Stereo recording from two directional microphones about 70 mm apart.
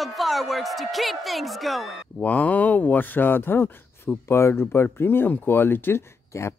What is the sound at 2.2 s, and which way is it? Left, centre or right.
Speech, left.